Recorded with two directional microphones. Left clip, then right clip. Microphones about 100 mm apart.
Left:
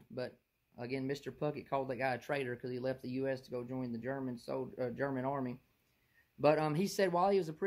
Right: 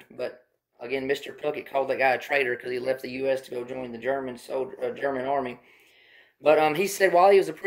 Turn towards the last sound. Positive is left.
turn(degrees=15)  # may be behind; listen again after turning